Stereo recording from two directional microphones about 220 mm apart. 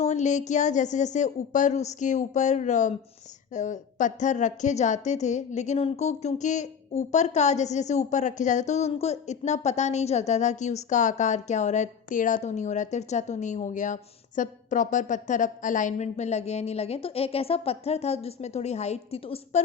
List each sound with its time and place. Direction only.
0.0 s a woman's voice: 30° left (ahead or behind)